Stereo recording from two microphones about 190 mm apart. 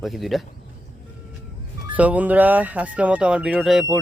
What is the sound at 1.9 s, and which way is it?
Speech, 10° right (ahead or behind).